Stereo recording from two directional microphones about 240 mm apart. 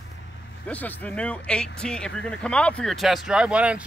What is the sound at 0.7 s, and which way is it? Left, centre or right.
Speech, centre.